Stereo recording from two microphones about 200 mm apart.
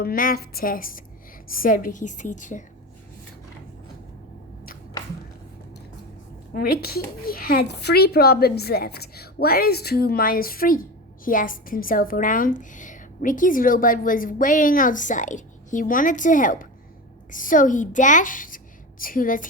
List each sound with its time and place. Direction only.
0.0 s a woman's voice: 45° left (ahead or behind)
6.5 s a woman's voice: 50° left (ahead or behind)